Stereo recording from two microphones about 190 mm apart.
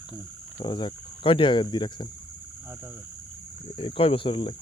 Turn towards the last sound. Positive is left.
turn(degrees=25)  # may be behind; listen again after turning